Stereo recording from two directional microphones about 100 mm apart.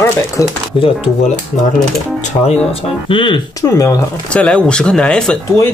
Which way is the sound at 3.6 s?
35° left (ahead or behind).